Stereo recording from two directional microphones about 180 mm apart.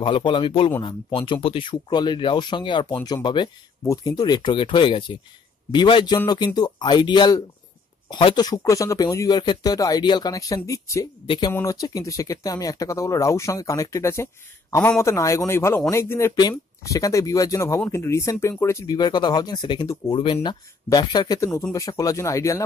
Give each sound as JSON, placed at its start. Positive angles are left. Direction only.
{"t": 0.0, "sound": "speech", "side_deg": 30}